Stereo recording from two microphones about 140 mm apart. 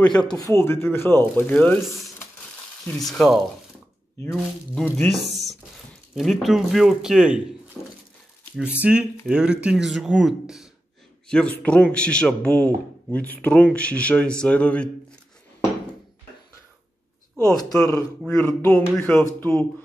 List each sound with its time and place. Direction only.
0.0 s speech: 5° left (ahead or behind)
0.4 s speech: 20° left (ahead or behind); by 3.3 s centre (ahead or behind)
4.9 s speech: centre (ahead or behind)
7.8 s speech: 5° left (ahead or behind)
8.5 s speech: 10° right (ahead or behind); by 14.9 s 10° left (ahead or behind)
17.5 s speech: 5° left (ahead or behind)